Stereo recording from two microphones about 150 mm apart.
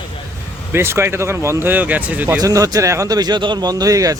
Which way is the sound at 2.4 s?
25° right (ahead or behind).